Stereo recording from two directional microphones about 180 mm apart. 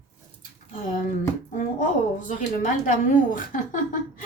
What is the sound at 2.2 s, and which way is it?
A woman's voice, 45° left (ahead or behind).